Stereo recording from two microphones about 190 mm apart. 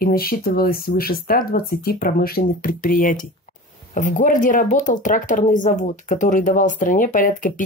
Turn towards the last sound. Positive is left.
turn(degrees=45)  # may be behind; listen again after turning